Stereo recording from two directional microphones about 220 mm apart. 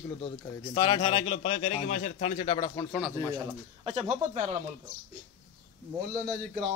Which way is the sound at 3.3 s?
25° right (ahead or behind).